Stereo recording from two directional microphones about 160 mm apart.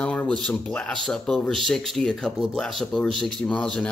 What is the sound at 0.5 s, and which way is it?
Speech, 5° left (ahead or behind).